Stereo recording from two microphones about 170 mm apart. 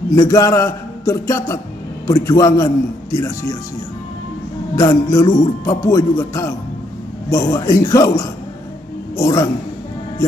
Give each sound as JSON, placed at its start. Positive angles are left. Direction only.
{"t": 0.1, "sound": "a man's voice", "side_deg": 20}
{"t": 4.7, "sound": "a man's voice", "side_deg": 20}